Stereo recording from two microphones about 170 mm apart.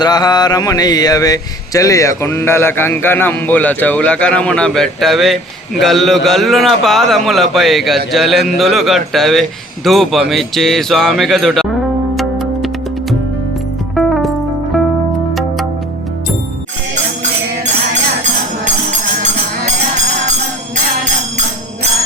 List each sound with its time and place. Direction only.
0.0 s speech: 25° left (ahead or behind); by 11.7 s centre (ahead or behind)
12.1 s music: centre (ahead or behind)
18.2 s music: 45° right (ahead or behind)